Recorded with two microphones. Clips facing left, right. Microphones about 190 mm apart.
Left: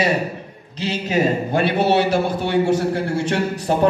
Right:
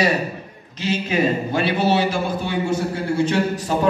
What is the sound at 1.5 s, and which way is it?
A man's voice, 60° left (ahead or behind).